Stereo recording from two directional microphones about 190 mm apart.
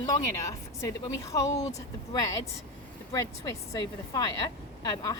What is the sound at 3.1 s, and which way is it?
Speech, 20° left (ahead or behind).